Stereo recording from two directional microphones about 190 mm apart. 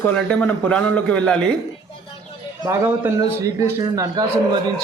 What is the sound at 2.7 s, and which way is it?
A man's voice, 15° right (ahead or behind).